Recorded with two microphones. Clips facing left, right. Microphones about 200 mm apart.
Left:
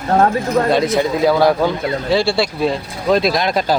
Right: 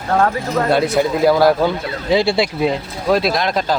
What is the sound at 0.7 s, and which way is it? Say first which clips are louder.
A man's voice: even; 5° right (ahead or behind).